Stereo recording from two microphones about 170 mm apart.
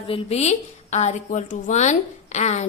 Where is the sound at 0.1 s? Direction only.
40° left (ahead or behind).